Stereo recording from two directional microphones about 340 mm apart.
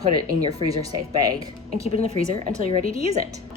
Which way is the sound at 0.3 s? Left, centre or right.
Centre.